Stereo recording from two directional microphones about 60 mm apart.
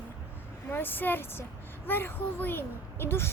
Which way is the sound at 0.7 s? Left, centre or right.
Left.